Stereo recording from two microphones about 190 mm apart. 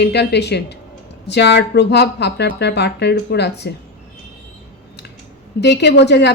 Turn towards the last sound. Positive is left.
turn(degrees=65)  # may be behind; listen again after turning